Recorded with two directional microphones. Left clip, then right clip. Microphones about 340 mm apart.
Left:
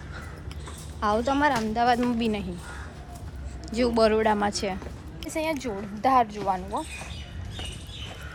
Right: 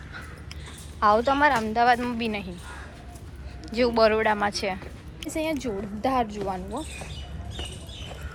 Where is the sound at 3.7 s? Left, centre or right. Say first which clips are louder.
Right 1 dB; centre.